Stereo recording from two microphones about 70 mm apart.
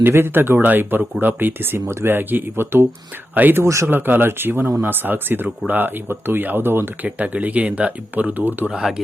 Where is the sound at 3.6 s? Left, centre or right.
Right.